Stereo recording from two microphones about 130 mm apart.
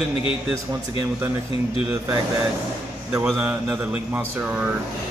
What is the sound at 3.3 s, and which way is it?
Mantra, 5° right (ahead or behind).